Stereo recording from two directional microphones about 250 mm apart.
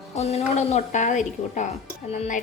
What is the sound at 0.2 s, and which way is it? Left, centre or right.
A woman's voice, left.